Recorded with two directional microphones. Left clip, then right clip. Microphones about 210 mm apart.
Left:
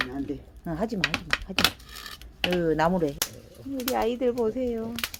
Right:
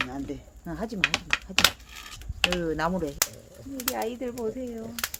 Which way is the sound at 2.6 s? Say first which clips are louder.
Left 4 dB; 20° left (ahead or behind).